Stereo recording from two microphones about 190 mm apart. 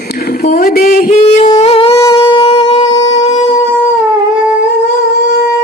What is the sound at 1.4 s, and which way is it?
Music, 35° left (ahead or behind).